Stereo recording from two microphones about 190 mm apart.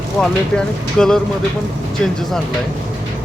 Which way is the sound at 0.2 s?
5° left (ahead or behind).